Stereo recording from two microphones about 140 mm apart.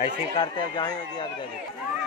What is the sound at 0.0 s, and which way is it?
Speech, 35° left (ahead or behind).